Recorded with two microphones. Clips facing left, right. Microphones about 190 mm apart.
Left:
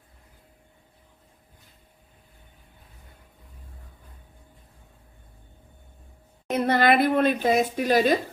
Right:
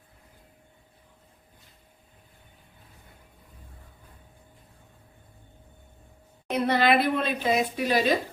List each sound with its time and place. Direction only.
6.5 s a woman's voice: 45° left (ahead or behind)